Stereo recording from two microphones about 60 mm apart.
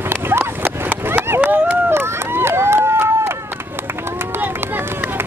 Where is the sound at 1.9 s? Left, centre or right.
Right.